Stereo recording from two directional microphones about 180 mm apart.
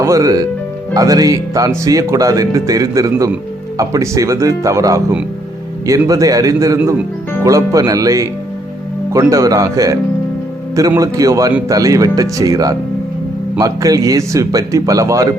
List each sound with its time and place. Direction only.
0.0 s speech: 20° right (ahead or behind)